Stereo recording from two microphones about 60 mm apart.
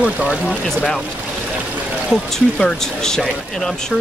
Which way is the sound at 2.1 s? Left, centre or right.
Centre.